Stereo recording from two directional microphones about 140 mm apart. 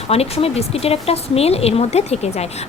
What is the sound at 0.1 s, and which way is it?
A woman's voice, 45° left (ahead or behind).